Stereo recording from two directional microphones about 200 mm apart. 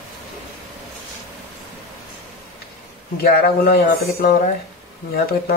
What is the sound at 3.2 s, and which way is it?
Speech, 50° left (ahead or behind).